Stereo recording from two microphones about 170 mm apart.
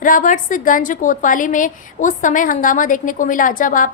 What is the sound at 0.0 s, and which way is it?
A woman's voice, 50° left (ahead or behind).